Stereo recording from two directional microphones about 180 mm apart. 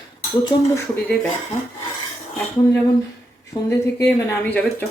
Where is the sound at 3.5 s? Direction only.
25° left (ahead or behind).